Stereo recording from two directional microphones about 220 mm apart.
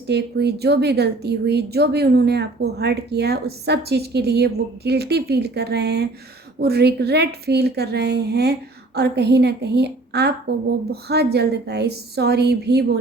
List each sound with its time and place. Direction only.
0.1 s a woman's voice: 50° right (ahead or behind)